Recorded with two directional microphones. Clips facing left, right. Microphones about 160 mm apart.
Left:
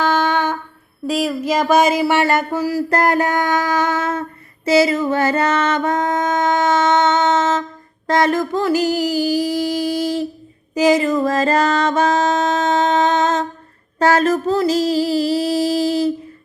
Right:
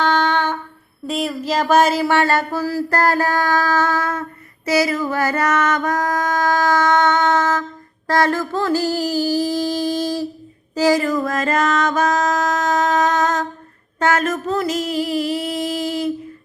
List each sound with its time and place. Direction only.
0.0 s humming: 10° left (ahead or behind)
1.0 s a sound: centre (ahead or behind)
10.8 s music: 20° left (ahead or behind)
14.0 s female singing: 30° left (ahead or behind)